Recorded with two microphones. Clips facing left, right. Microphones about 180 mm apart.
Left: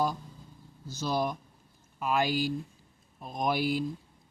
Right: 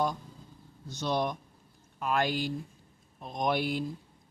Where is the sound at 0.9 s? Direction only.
Centre (ahead or behind).